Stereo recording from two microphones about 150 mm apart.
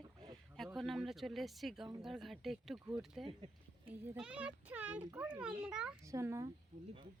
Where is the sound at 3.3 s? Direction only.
40° right (ahead or behind).